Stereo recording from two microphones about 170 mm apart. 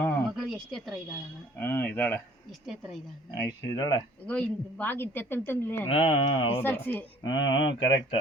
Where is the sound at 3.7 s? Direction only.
25° left (ahead or behind).